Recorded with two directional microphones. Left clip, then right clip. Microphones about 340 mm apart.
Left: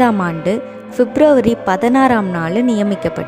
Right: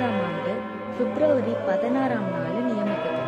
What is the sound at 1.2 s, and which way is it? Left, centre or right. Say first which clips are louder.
A woman's voice: left 10 dB; left.